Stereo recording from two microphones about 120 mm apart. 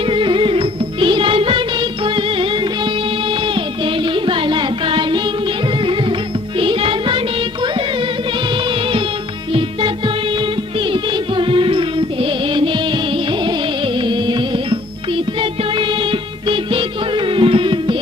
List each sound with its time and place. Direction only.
0.0 s music: 45° right (ahead or behind)
9.5 s music: 45° right (ahead or behind)